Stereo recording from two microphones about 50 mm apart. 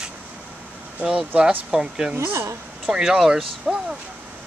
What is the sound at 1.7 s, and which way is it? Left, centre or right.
Speech, centre.